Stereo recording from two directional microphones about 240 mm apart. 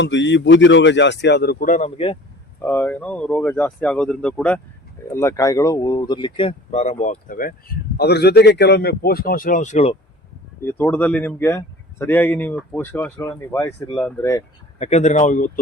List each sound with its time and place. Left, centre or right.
0.0 s speech: left
2.6 s speech: centre; by 9.9 s left
10.6 s speech: centre
14.8 s speech: left